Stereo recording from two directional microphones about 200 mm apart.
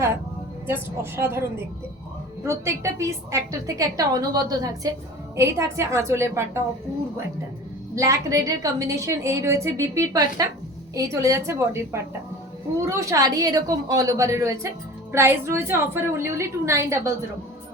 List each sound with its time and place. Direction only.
0.7 s a woman's voice: 10° right (ahead or behind)
7.9 s a woman's voice: 15° right (ahead or behind)